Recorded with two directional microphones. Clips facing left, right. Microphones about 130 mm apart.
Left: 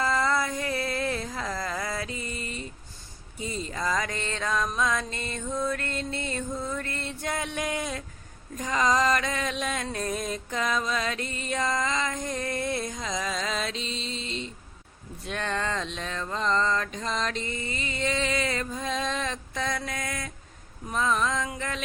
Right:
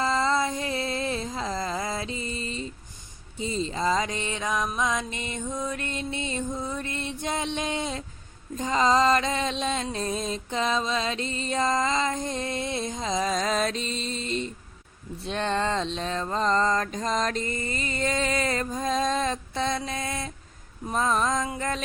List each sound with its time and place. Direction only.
0.0 s a sound: 25° right (ahead or behind)
3.3 s music: 25° right (ahead or behind); by 14.5 s 45° right (ahead or behind)
15.2 s mantra: 30° right (ahead or behind)
20.9 s music: 35° right (ahead or behind)